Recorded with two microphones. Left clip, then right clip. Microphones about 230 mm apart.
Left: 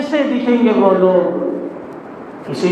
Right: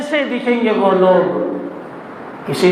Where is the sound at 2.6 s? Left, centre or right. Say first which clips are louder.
Right 3 dB; right.